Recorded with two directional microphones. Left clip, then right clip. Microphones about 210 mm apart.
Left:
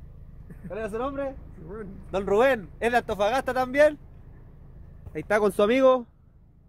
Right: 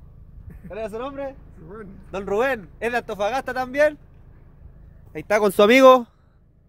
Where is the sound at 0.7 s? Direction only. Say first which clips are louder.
Right 1 dB; 10° left (ahead or behind).